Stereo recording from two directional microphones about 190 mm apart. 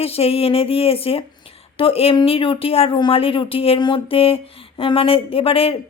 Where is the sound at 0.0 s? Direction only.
30° left (ahead or behind).